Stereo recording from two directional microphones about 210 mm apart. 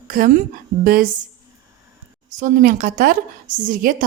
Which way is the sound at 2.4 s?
40° right (ahead or behind).